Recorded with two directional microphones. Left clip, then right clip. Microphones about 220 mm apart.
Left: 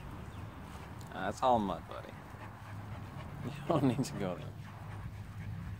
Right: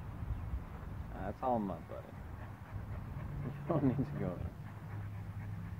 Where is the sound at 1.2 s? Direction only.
30° left (ahead or behind).